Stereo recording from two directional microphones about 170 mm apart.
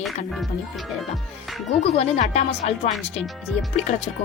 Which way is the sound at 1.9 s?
40° left (ahead or behind).